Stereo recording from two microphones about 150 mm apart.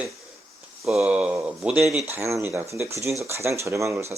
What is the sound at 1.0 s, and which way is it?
Speech, 10° right (ahead or behind).